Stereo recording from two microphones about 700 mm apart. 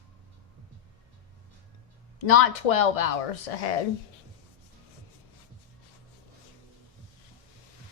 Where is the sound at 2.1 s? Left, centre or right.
Left.